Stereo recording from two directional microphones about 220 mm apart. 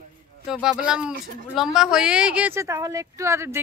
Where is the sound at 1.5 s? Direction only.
Centre (ahead or behind).